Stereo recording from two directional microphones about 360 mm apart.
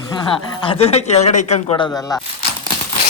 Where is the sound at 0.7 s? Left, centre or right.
Centre.